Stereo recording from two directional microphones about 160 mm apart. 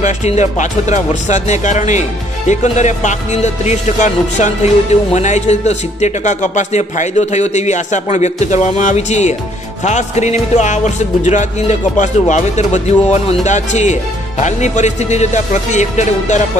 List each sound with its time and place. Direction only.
0.0 s speech: 45° left (ahead or behind)